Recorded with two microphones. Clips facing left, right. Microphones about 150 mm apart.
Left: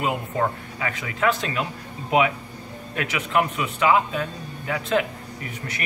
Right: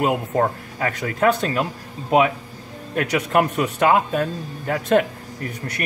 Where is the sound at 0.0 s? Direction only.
50° right (ahead or behind).